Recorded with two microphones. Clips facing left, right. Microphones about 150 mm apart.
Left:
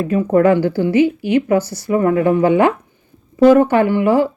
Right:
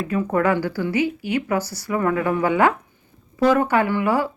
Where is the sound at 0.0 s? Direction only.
30° left (ahead or behind).